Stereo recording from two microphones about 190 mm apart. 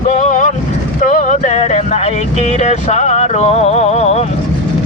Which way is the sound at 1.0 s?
40° left (ahead or behind).